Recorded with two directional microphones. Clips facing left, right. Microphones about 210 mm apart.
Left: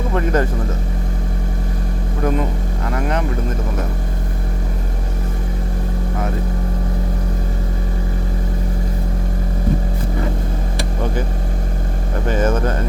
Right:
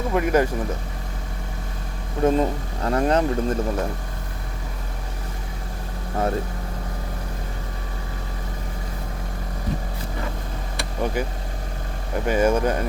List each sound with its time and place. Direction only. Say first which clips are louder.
0.1 s speech: even; 10° right (ahead or behind)
2.2 s speech: right 1 dB; 30° right (ahead or behind)
12.3 s speech: even; 10° right (ahead or behind)